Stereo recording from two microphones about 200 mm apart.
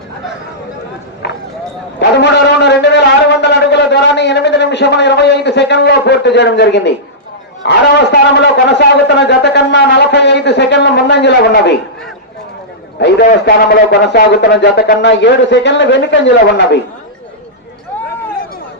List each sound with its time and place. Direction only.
1.2 s a sound: 60° left (ahead or behind)
7.6 s a man's voice: 60° left (ahead or behind)
13.0 s a man's voice: 60° left (ahead or behind)